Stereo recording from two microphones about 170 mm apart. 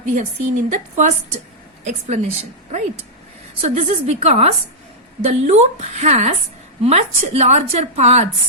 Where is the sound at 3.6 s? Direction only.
40° right (ahead or behind).